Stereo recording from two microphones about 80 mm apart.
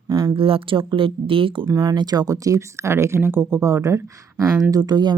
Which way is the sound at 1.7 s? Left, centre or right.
Right.